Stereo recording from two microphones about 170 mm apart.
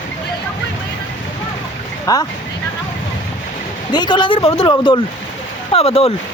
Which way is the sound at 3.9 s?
25° left (ahead or behind).